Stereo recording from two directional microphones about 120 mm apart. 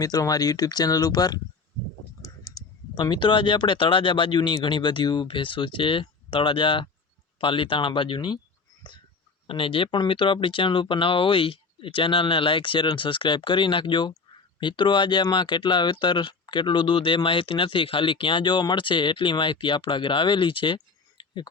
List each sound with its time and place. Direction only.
0.0 s speech: 30° left (ahead or behind)
2.5 s clicking: 30° left (ahead or behind)
2.9 s speech: 40° left (ahead or behind)
9.5 s speech: 45° left (ahead or behind)